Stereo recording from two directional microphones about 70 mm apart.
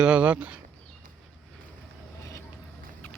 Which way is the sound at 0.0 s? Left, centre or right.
Centre.